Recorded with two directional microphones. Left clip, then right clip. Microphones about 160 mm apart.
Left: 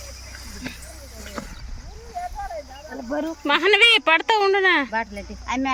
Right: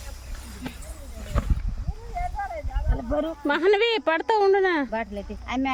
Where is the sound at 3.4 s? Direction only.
30° right (ahead or behind).